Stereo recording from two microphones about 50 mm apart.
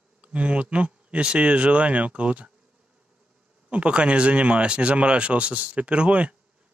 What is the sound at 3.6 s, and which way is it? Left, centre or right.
Speech, right.